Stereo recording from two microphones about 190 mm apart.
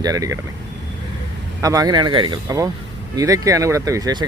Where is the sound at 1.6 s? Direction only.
20° right (ahead or behind).